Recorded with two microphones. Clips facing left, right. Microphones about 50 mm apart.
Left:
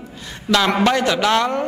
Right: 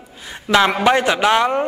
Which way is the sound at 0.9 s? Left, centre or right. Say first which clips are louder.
Right 2 dB; right.